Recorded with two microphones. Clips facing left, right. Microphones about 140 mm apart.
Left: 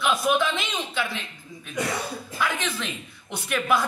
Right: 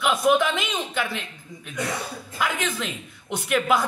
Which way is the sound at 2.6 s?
15° right (ahead or behind).